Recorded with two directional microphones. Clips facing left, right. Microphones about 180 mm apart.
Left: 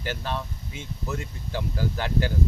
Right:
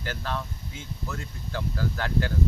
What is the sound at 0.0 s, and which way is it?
Speech, 20° left (ahead or behind).